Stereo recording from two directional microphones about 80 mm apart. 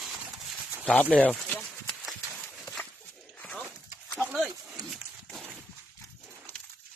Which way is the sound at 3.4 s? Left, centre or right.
Centre.